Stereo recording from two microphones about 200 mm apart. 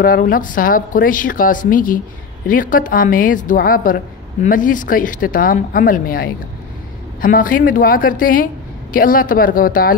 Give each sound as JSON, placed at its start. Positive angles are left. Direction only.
{"t": 0.0, "sound": "a woman's voice", "side_deg": 45}